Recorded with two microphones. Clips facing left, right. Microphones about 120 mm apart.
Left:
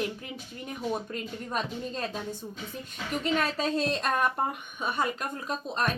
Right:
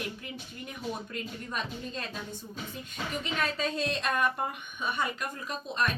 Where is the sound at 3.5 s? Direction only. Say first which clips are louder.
Left 3 dB; 35° left (ahead or behind).